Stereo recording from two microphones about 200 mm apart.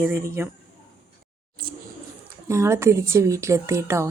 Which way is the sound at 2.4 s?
15° right (ahead or behind).